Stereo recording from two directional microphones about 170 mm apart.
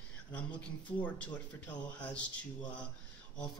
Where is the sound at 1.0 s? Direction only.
10° left (ahead or behind).